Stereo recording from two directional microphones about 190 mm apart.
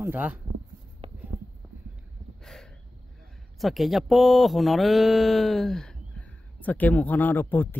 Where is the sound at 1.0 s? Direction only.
30° right (ahead or behind).